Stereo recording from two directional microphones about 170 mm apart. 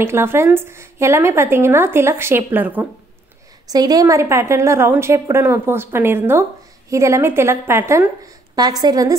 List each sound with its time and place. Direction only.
0.0 s speech: 15° right (ahead or behind)
3.7 s speech: 20° right (ahead or behind)